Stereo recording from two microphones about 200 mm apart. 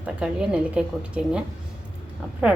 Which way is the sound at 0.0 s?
5° right (ahead or behind).